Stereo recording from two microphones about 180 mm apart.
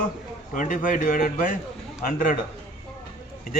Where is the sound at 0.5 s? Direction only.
45° left (ahead or behind).